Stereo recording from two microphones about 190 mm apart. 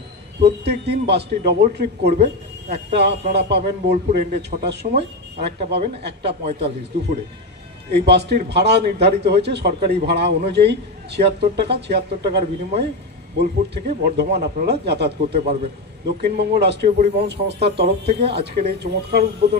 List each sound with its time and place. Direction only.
0.4 s a man's voice: 60° right (ahead or behind)
7.9 s a man's voice: 60° right (ahead or behind)